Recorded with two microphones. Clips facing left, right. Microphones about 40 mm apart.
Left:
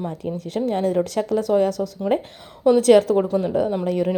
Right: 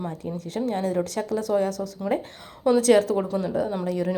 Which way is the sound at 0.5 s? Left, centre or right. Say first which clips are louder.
Left 4 dB; left.